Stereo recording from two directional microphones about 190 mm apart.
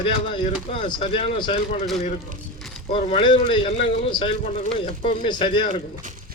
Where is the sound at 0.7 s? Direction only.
30° left (ahead or behind).